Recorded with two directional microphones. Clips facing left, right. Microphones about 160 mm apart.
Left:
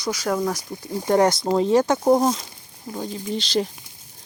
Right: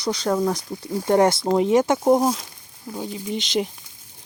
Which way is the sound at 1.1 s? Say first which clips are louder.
Right 1 dB; 25° right (ahead or behind).